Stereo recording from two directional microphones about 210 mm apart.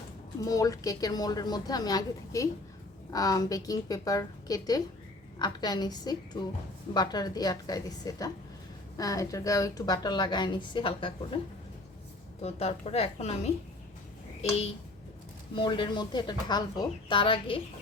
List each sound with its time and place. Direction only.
0.3 s a woman's voice: 15° left (ahead or behind)
12.4 s a woman's voice: 30° left (ahead or behind)
15.5 s a woman's voice: 25° left (ahead or behind)